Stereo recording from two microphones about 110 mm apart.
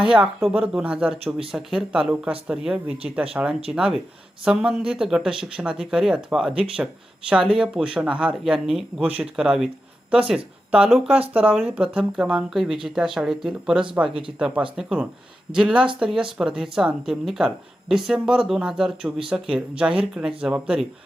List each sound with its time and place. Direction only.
0.0 s speech: 5° right (ahead or behind)
14.1 s speech: 50° right (ahead or behind)
14.3 s speech: 10° right (ahead or behind)